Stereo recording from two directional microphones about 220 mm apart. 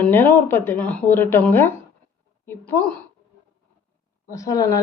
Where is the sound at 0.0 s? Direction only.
10° left (ahead or behind).